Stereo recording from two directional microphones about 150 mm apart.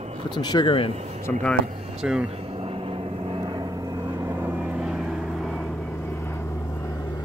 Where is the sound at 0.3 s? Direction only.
30° left (ahead or behind).